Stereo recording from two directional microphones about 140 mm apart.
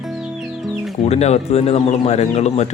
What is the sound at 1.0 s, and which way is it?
Speech, 50° left (ahead or behind).